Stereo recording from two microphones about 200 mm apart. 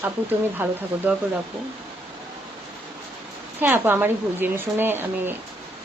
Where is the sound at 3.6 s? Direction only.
10° right (ahead or behind).